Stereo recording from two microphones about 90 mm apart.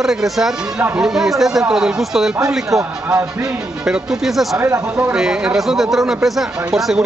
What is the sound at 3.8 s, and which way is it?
Speech, 10° right (ahead or behind).